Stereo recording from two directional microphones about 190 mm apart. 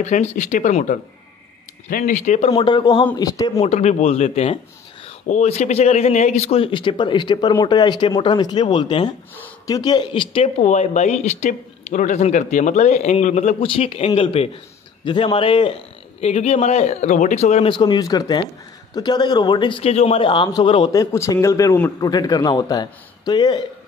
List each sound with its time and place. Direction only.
0.0 s speech: 35° left (ahead or behind)
2.5 s a man's voice: 25° left (ahead or behind)
3.6 s a man's voice: 35° left (ahead or behind)
17.7 s a man's voice: 20° left (ahead or behind)